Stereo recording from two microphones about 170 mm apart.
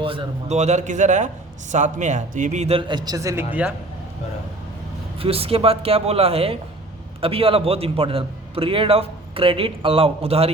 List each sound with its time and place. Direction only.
0.0 s a man's voice: 35° right (ahead or behind); by 3.4 s 20° right (ahead or behind)
5.2 s a man's voice: 35° right (ahead or behind)